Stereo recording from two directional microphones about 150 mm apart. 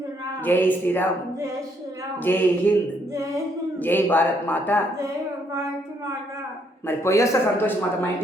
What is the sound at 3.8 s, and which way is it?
A man's voice, 15° left (ahead or behind).